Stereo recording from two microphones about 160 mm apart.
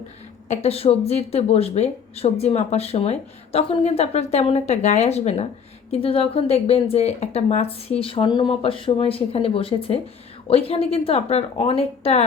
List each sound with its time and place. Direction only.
0.4 s speech: 40° left (ahead or behind)